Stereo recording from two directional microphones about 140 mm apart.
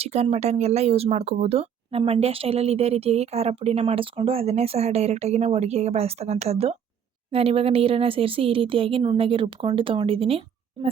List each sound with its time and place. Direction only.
0.0 s speech: 45° right (ahead or behind)